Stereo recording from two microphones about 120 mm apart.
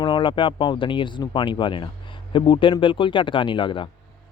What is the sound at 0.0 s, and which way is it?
Speech, 40° left (ahead or behind).